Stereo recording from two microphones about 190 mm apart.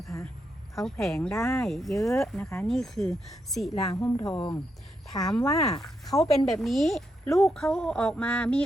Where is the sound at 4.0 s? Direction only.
20° left (ahead or behind).